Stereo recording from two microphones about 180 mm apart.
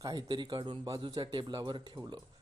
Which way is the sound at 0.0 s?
25° right (ahead or behind).